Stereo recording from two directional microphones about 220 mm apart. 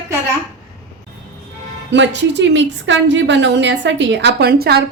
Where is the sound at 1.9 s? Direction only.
55° right (ahead or behind).